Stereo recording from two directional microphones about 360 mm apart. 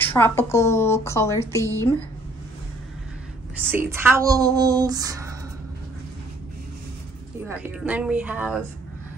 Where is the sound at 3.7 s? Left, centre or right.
Centre.